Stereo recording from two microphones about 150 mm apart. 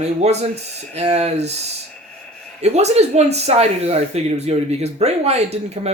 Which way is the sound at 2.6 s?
45° right (ahead or behind).